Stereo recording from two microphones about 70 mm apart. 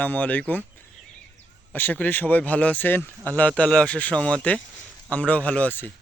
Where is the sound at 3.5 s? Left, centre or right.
Centre.